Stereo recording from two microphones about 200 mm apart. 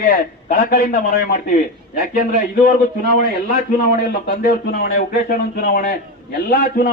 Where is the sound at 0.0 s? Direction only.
40° left (ahead or behind).